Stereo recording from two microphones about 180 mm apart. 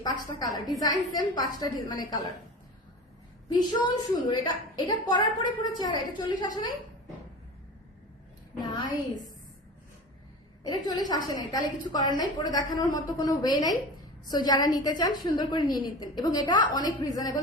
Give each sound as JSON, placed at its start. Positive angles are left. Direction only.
{"t": 0.3, "sound": "a woman's voice", "side_deg": 20}
{"t": 3.5, "sound": "a woman's voice", "side_deg": 20}
{"t": 8.6, "sound": "a woman's voice", "side_deg": 25}
{"t": 10.6, "sound": "a woman's voice", "side_deg": 20}